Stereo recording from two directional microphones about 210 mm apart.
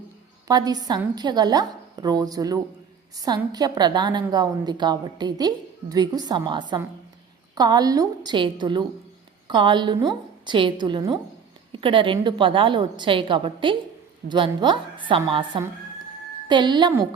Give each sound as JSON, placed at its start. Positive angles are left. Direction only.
{"t": 0.4, "sound": "a woman's voice", "side_deg": -20}